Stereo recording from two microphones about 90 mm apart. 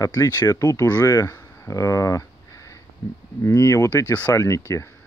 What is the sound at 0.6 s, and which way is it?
Speech, 30° left (ahead or behind).